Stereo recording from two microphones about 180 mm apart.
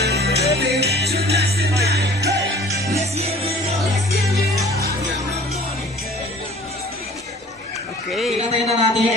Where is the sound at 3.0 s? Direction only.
35° right (ahead or behind).